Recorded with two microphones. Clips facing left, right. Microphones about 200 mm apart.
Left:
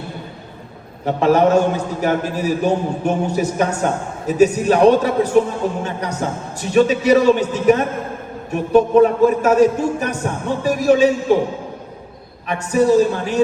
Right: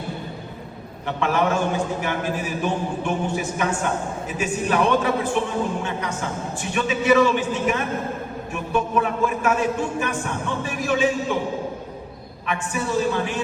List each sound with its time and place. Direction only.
1.0 s a man's voice: 40° left (ahead or behind)
12.7 s a man's voice: 40° left (ahead or behind)